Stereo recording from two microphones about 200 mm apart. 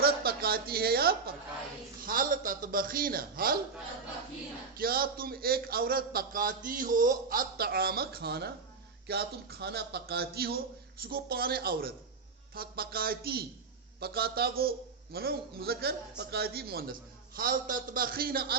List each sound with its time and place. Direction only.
0.0 s a sound: 50° right (ahead or behind)
2.0 s a man's voice: 45° right (ahead or behind)
4.8 s a man's voice: 50° right (ahead or behind)